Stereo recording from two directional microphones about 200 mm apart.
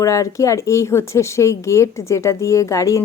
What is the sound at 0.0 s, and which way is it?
Speech, 15° left (ahead or behind).